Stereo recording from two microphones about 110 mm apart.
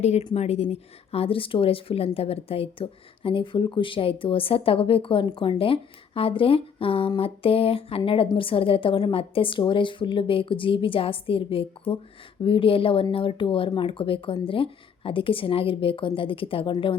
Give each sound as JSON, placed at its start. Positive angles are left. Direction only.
{"t": 0.0, "sound": "speech", "side_deg": 75}
{"t": 0.7, "sound": "speech", "side_deg": 60}